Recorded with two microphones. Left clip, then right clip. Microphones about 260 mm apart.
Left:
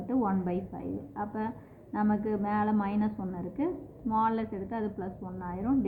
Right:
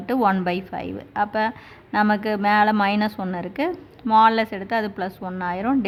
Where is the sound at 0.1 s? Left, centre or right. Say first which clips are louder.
Right 11 dB; right.